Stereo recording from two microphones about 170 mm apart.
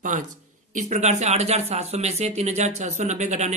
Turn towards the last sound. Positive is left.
turn(degrees=-40)  # may be behind; listen again after turning